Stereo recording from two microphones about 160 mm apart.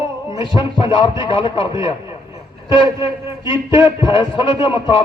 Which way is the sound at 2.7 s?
30° left (ahead or behind).